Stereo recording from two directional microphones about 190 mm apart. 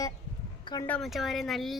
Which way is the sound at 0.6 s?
20° left (ahead or behind).